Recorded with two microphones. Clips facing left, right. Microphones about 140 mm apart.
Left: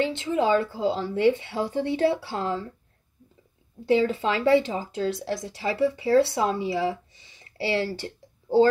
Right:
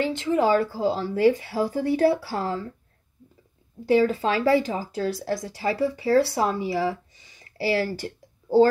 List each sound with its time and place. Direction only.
0.0 s a woman's voice: 25° left (ahead or behind)
3.8 s a woman's voice: 25° left (ahead or behind)